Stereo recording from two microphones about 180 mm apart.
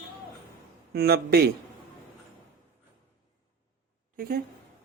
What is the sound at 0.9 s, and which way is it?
Speech, 60° right (ahead or behind).